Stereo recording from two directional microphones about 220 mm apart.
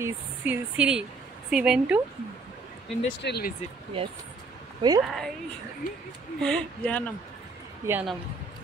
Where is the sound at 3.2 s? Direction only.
50° left (ahead or behind).